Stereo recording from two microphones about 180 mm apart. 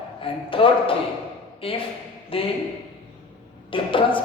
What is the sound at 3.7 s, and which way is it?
Speech, 30° left (ahead or behind).